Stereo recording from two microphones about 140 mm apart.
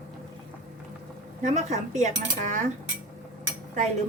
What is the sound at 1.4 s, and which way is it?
Speech, 55° right (ahead or behind).